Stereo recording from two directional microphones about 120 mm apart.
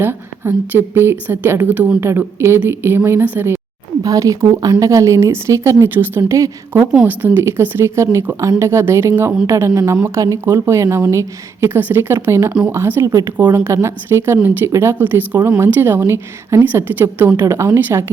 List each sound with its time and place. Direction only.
0.0 s speech: 20° right (ahead or behind)
4.0 s speech: 30° right (ahead or behind)